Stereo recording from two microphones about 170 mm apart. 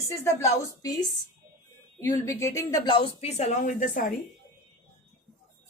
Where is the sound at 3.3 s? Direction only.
40° left (ahead or behind).